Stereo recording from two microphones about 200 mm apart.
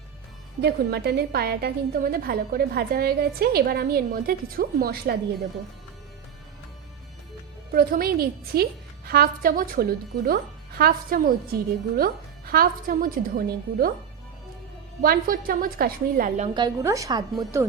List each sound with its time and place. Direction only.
0.6 s a woman's voice: 55° right (ahead or behind)
7.7 s a woman's voice: 45° right (ahead or behind)
15.0 s a woman's voice: 45° right (ahead or behind)
16.6 s a woman's voice: 20° right (ahead or behind)